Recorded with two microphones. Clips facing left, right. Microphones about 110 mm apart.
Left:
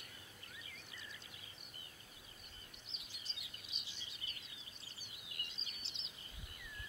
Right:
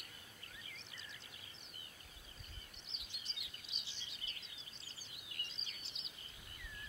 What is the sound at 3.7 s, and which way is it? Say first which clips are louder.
Bird: even; 30° right (ahead or behind).